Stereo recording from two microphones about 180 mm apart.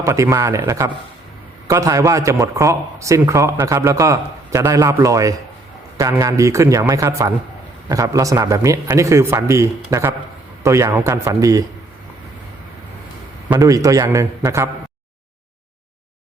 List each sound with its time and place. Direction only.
0.0 s a man's voice: 15° right (ahead or behind)
13.5 s a man's voice: 20° right (ahead or behind)